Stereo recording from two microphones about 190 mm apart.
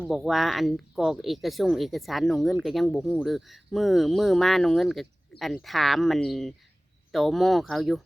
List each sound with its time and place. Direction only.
0.1 s speech: centre (ahead or behind)